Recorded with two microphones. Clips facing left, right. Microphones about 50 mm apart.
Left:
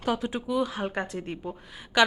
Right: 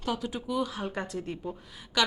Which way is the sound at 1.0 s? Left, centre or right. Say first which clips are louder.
Left 2 dB; left.